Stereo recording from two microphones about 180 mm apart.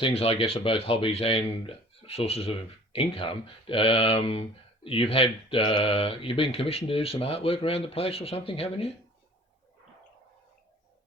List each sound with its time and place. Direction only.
0.0 s speech: 35° left (ahead or behind)